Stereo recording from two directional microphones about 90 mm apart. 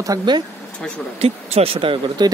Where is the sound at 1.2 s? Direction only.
90° right.